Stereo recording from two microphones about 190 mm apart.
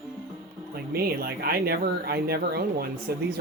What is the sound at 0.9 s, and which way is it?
Speech, 55° right (ahead or behind).